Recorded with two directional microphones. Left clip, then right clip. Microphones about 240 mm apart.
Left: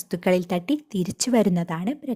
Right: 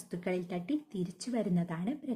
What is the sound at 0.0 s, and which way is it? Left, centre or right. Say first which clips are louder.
A woman's voice: left 14 dB; left.